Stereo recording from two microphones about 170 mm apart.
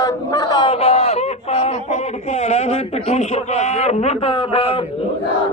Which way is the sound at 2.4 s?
40° left (ahead or behind).